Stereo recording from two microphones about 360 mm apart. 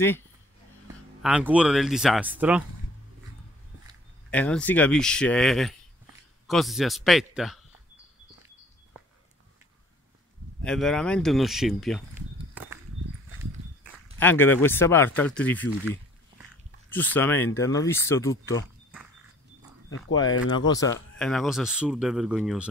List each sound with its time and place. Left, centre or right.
1.2 s speech: centre
4.3 s speech: centre
10.6 s speech: centre
14.1 s speech: centre
20.2 s speech: left
20.7 s speech: centre